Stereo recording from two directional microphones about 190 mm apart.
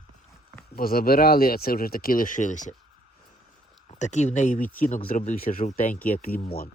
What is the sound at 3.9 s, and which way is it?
Speech, 40° left (ahead or behind).